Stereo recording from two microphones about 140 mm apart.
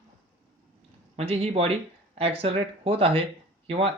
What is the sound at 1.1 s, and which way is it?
Speech, 45° right (ahead or behind).